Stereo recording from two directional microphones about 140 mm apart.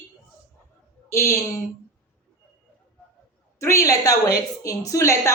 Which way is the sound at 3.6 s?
20° left (ahead or behind).